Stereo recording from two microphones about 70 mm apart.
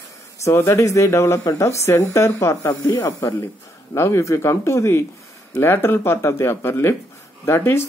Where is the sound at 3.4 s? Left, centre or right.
Left.